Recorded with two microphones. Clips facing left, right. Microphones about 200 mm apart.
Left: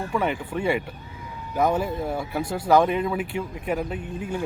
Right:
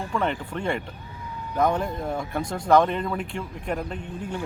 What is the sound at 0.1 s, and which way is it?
Speech, 10° left (ahead or behind).